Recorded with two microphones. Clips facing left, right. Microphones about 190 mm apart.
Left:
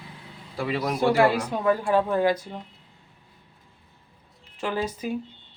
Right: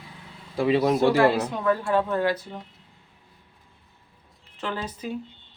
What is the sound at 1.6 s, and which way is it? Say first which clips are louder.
Speech: left 2 dB; 15° left (ahead or behind).